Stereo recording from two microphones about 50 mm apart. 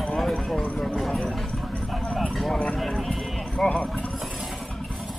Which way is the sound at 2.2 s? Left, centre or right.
Centre.